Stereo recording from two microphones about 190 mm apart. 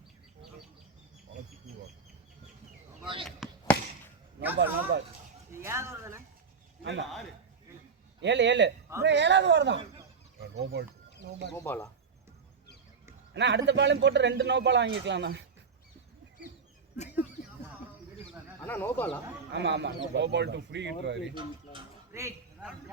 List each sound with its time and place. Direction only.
3.2 s basketball bounce: centre (ahead or behind)
4.5 s speech: 60° right (ahead or behind)
5.5 s speech: 15° right (ahead or behind)
7.0 s a man's voice: centre (ahead or behind)
8.2 s a man's voice: 70° right (ahead or behind)
10.4 s a sound: 60° right (ahead or behind)
11.5 s speech: 10° left (ahead or behind)
13.3 s a man's voice: 65° right (ahead or behind)
18.6 s speech: 10° left (ahead or behind)
19.5 s a man's voice: 65° right (ahead or behind)